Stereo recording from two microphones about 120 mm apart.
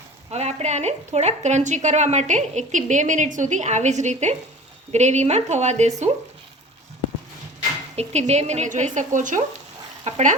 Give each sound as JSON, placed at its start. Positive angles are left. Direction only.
{"t": 0.3, "sound": "a woman's voice", "side_deg": -65}
{"t": 7.9, "sound": "a woman's voice", "side_deg": -65}
{"t": 10.0, "sound": "a woman's voice", "side_deg": -70}